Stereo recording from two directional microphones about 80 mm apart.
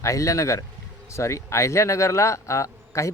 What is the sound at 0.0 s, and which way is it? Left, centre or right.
Speech, left.